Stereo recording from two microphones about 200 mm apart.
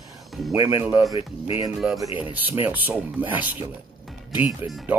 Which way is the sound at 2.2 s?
10° right (ahead or behind).